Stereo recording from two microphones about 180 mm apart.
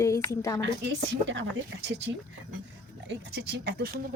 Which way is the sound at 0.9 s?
85° right.